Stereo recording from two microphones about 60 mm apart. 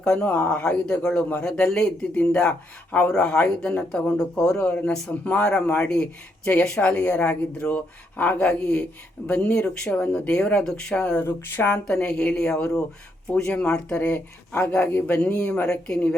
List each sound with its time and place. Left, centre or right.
0.0 s speech: centre
3.1 s speech: centre
11.2 s speech: left
11.9 s speech: centre
14.1 s speech: left
15.1 s speech: left
15.6 s speech: centre